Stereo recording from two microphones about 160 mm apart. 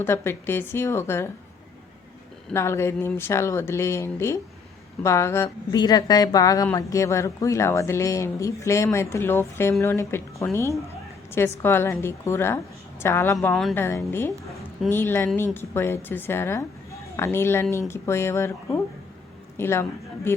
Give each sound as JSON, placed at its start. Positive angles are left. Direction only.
{"t": 0.0, "sound": "speech", "side_deg": 15}
{"t": 2.5, "sound": "a woman's voice", "side_deg": 15}
{"t": 13.5, "sound": "a woman's voice", "side_deg": 0}
{"t": 13.7, "sound": "a woman's voice", "side_deg": 15}